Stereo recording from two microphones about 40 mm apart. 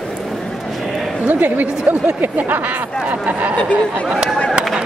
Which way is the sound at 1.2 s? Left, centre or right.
Right.